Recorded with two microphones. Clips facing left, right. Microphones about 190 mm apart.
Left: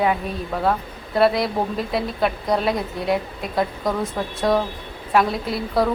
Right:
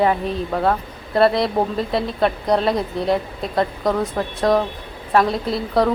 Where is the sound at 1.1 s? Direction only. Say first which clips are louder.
Right 2 dB; centre (ahead or behind).